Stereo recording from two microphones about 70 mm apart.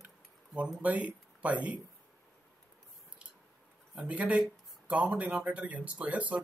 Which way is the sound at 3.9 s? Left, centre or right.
Centre.